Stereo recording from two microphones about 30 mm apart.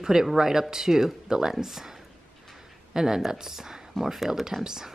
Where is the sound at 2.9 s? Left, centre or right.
Centre.